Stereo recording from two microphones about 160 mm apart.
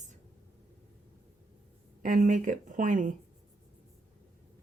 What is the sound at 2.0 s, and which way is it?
A woman's voice, 55° right (ahead or behind).